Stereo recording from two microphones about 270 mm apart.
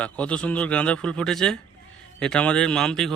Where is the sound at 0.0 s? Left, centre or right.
Centre.